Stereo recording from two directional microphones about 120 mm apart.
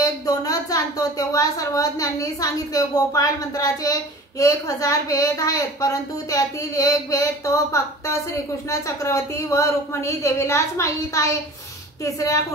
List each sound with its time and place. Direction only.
0.0 s a woman's voice: 30° left (ahead or behind)